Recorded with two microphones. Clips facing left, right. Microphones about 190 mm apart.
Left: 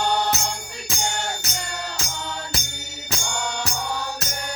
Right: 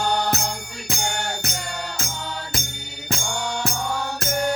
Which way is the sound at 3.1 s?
55° right (ahead or behind).